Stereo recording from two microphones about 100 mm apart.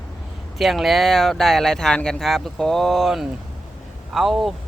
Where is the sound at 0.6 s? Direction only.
Centre (ahead or behind).